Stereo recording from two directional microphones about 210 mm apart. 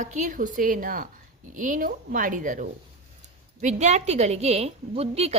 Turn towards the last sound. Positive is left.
turn(degrees=-30)  # may be behind; listen again after turning